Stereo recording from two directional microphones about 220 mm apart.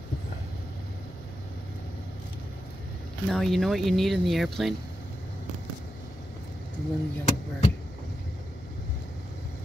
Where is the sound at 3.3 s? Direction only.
Centre (ahead or behind).